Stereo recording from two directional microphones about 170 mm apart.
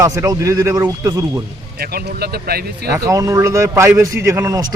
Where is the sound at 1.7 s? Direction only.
70° right (ahead or behind).